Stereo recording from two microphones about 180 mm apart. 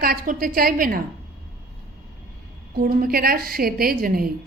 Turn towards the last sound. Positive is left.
turn(degrees=-55)  # may be behind; listen again after turning